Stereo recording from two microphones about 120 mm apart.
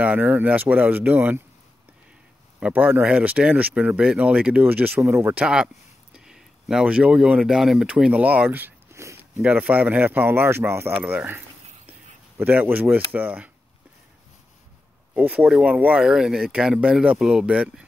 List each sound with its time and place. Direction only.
0.0 s speech: 15° right (ahead or behind)
2.6 s speech: 15° right (ahead or behind)
15.1 s speech: 10° right (ahead or behind)